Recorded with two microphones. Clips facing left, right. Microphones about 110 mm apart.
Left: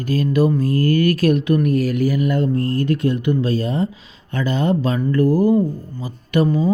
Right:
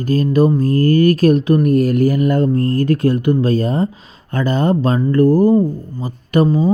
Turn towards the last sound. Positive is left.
turn(degrees=-30)  # may be behind; listen again after turning